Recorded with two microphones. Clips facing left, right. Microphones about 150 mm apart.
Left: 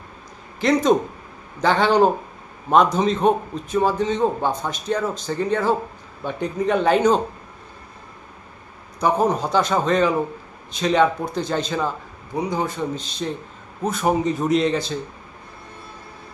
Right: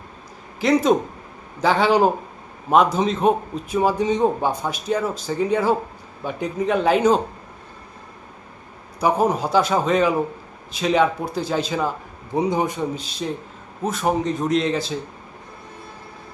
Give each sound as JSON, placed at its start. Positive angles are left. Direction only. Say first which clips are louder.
{"t": 0.6, "sound": "a man's voice", "louder": "even", "side_deg": -5}
{"t": 9.0, "sound": "a man's voice", "louder": "even", "side_deg": -10}
{"t": 12.3, "sound": "a man's voice", "louder": "right 3 dB", "side_deg": -25}